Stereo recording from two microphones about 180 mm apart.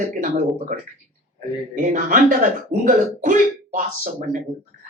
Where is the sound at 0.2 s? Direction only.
45° right (ahead or behind).